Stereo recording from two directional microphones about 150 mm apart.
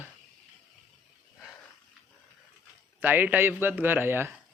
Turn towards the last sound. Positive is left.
turn(degrees=-15)  # may be behind; listen again after turning